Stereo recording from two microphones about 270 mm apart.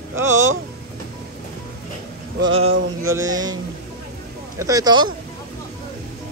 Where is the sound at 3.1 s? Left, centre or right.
Centre.